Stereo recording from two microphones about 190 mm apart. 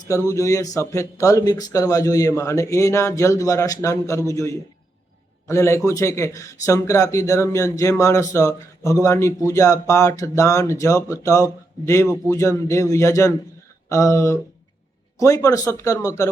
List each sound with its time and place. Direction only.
0.1 s speech: 15° left (ahead or behind)
5.5 s speech: 15° left (ahead or behind)